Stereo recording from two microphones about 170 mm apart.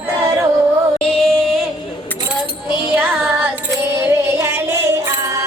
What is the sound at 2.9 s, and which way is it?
Child singing, 10° right (ahead or behind).